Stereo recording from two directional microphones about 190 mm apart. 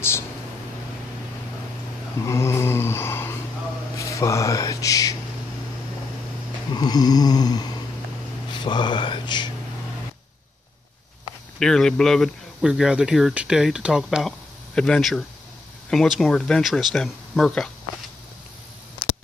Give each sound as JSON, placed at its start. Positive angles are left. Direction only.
{"t": 2.2, "sound": "mantra", "side_deg": 15}
{"t": 3.9, "sound": "speech", "side_deg": 15}
{"t": 6.7, "sound": "a sound", "side_deg": 20}
{"t": 8.5, "sound": "speech", "side_deg": 25}
{"t": 11.6, "sound": "speech", "side_deg": 0}